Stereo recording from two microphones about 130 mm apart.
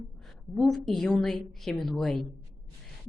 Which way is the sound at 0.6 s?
Centre (ahead or behind).